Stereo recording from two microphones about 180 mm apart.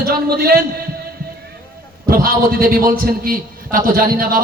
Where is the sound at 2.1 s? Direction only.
55° right (ahead or behind).